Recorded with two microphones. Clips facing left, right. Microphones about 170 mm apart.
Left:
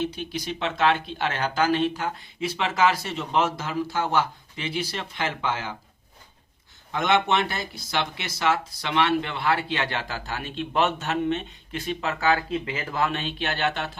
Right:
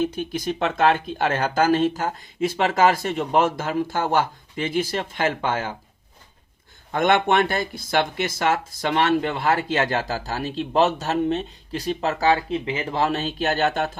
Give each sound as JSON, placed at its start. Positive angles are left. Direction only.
{"t": 0.0, "sound": "speech", "side_deg": -50}
{"t": 6.9, "sound": "speech", "side_deg": -55}